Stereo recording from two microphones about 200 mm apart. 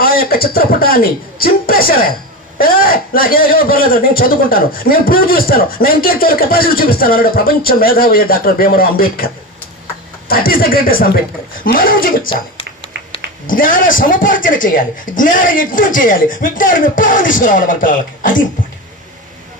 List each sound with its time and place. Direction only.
0.0 s a man's voice: 50° left (ahead or behind)
13.5 s a man's voice: 40° left (ahead or behind)